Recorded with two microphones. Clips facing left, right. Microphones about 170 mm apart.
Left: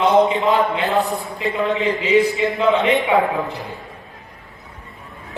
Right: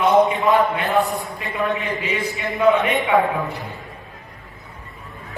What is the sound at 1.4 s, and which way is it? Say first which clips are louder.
A man's voice: left 5 dB; 20° left (ahead or behind).